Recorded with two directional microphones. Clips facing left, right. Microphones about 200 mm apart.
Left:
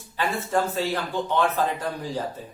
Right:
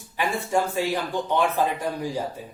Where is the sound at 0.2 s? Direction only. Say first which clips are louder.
Right 1 dB; 15° right (ahead or behind).